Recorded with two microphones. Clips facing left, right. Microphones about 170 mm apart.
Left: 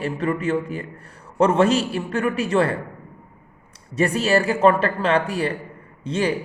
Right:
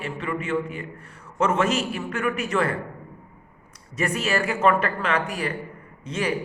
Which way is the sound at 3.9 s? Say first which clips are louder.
Left 6 dB; 30° left (ahead or behind).